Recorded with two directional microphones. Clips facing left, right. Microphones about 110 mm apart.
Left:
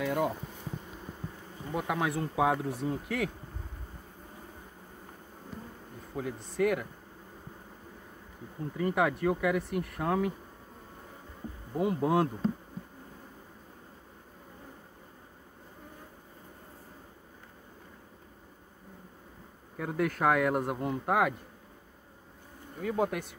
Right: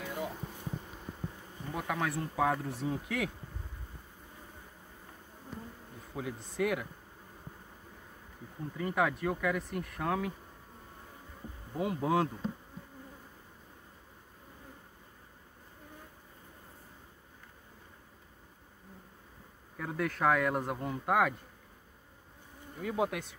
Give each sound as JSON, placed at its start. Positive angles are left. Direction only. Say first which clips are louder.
{"t": 0.0, "sound": "bee", "louder": "left 9 dB", "side_deg": 70}
{"t": 1.7, "sound": "speech", "louder": "left 3 dB", "side_deg": 5}
{"t": 6.1, "sound": "speech", "louder": "left 3 dB", "side_deg": -5}
{"t": 8.7, "sound": "speech", "louder": "left 3 dB", "side_deg": 0}
{"t": 11.7, "sound": "speech", "louder": "left 3 dB", "side_deg": 0}
{"t": 19.8, "sound": "speech", "louder": "left 3 dB", "side_deg": 5}
{"t": 22.8, "sound": "speech", "louder": "left 2 dB", "side_deg": -5}